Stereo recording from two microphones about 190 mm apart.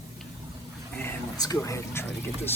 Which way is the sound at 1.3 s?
15° left (ahead or behind).